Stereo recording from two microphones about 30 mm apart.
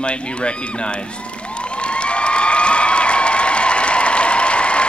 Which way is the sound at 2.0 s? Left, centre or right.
Left.